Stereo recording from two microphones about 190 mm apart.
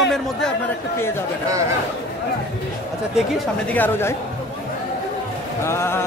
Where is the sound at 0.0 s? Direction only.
5° left (ahead or behind).